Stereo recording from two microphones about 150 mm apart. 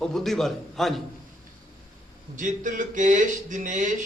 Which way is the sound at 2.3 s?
60° right (ahead or behind).